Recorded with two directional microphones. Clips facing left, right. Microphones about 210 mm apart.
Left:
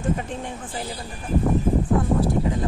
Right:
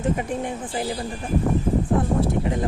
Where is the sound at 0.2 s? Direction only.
15° right (ahead or behind).